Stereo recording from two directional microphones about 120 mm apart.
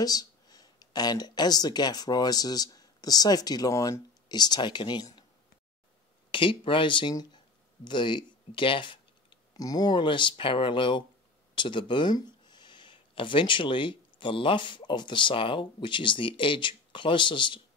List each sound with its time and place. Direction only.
0.0 s speech: 30° left (ahead or behind)
6.3 s speech: 45° left (ahead or behind)